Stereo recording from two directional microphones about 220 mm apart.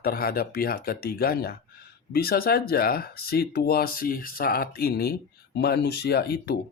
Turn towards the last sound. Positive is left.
turn(degrees=45)  # may be behind; listen again after turning